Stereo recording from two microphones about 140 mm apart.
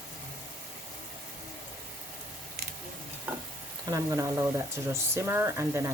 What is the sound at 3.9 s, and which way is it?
Speech, 20° right (ahead or behind).